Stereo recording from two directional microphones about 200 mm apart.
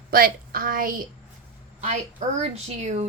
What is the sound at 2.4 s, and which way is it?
Speech, 35° right (ahead or behind).